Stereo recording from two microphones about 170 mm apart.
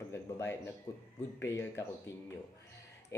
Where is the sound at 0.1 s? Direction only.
15° left (ahead or behind).